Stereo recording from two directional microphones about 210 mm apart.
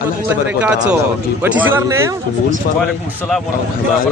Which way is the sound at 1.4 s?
10° right (ahead or behind).